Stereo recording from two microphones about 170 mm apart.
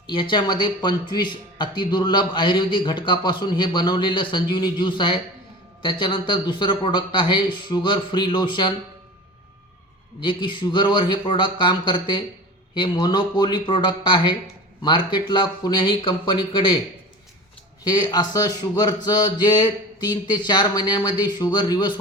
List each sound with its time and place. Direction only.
0.1 s a man's voice: 30° left (ahead or behind)
10.2 s a man's voice: 30° left (ahead or behind)
17.8 s a man's voice: 25° left (ahead or behind)